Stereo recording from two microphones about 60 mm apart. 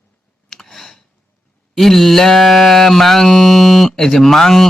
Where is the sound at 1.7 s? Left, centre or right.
Centre.